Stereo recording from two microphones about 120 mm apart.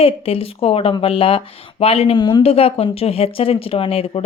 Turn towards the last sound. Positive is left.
turn(degrees=55)  # may be behind; listen again after turning